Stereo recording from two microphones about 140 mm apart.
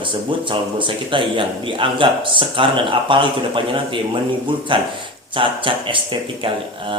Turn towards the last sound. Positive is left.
turn(degrees=-35)  # may be behind; listen again after turning